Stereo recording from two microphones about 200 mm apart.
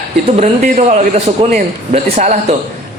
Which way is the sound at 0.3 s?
35° right (ahead or behind).